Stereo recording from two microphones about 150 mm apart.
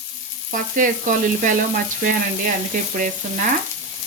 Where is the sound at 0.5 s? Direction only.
60° right (ahead or behind).